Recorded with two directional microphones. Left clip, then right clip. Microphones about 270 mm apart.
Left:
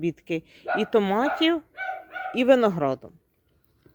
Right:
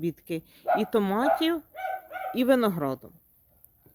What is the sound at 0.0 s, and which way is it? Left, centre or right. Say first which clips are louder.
Speech: left 4 dB; centre.